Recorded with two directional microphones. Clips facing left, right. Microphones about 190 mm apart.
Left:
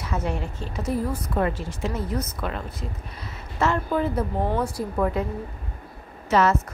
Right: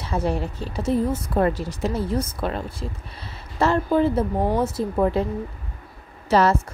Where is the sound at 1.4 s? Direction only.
40° right (ahead or behind).